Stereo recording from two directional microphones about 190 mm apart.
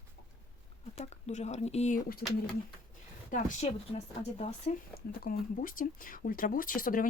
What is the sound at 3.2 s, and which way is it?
Speech, 40° left (ahead or behind).